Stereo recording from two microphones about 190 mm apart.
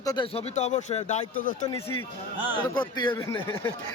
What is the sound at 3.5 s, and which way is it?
Speech, 15° left (ahead or behind).